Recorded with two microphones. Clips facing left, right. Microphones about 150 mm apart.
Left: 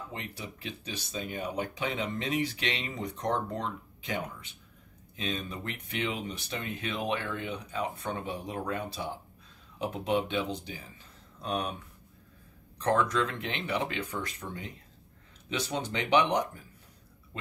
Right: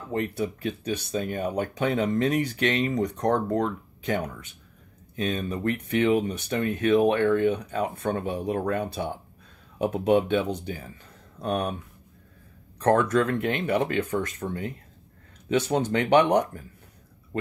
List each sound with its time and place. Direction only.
0.1 s speech: 50° right (ahead or behind)
12.8 s speech: 55° right (ahead or behind)